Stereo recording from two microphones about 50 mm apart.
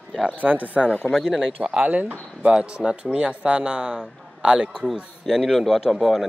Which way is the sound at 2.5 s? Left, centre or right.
Centre.